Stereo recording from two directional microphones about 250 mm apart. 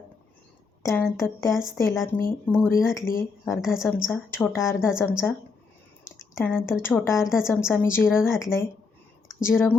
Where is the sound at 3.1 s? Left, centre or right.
Left.